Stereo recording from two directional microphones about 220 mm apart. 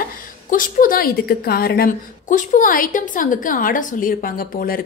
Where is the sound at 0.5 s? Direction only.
40° left (ahead or behind).